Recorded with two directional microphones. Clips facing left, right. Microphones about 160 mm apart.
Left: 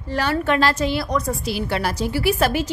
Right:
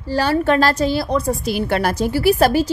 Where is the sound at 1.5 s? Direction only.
50° right (ahead or behind).